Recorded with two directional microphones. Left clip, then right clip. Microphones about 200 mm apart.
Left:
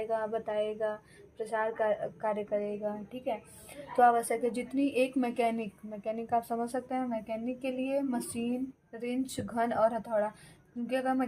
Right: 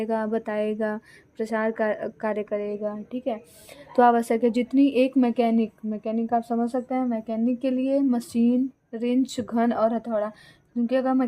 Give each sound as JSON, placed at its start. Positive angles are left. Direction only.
{"t": 0.0, "sound": "a woman's voice", "side_deg": -65}
{"t": 7.4, "sound": "speech", "side_deg": -55}